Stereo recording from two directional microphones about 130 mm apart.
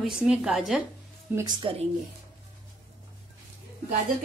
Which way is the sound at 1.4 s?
40° right (ahead or behind).